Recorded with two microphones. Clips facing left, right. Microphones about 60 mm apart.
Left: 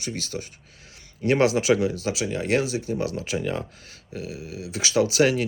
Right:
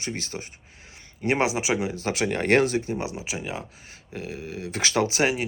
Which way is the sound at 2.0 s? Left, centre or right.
Right.